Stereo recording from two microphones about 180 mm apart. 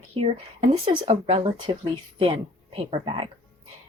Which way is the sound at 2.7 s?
30° right (ahead or behind).